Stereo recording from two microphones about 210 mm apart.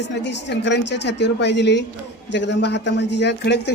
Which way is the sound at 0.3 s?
55° left (ahead or behind).